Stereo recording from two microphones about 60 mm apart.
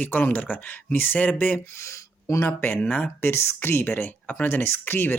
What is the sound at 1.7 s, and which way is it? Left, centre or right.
Speech, left.